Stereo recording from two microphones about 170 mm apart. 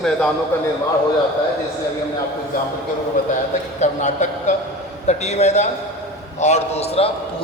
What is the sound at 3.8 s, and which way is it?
A man's voice, 45° left (ahead or behind).